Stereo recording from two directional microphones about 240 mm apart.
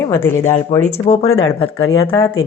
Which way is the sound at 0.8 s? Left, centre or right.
Left.